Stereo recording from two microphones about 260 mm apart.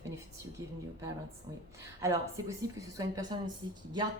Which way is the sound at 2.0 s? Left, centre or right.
Centre.